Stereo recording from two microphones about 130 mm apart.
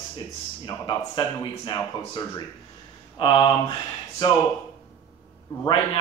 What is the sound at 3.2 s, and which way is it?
Speech, 35° left (ahead or behind).